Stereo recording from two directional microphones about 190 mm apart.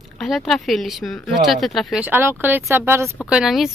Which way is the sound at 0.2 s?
Centre (ahead or behind).